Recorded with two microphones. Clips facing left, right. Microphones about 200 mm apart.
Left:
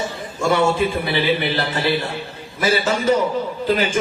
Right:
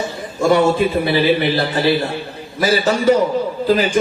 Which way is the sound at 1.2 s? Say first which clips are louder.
Right 3 dB; 35° right (ahead or behind).